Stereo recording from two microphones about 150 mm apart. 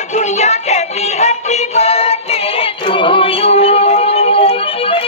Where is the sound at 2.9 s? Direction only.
35° left (ahead or behind).